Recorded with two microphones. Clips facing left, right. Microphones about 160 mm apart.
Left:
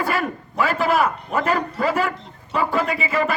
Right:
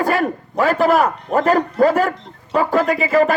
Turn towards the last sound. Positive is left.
turn(degrees=-45)  # may be behind; listen again after turning